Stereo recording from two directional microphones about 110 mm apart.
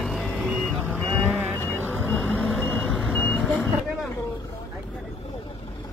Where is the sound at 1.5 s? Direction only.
20° left (ahead or behind).